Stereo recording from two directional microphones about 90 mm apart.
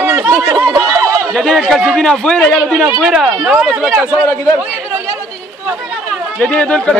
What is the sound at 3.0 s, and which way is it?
Speech, 5° right (ahead or behind).